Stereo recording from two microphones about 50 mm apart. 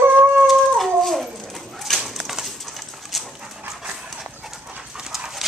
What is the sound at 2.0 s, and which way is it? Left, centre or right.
Bird, centre.